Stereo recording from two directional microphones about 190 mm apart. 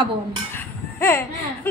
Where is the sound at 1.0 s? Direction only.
15° left (ahead or behind).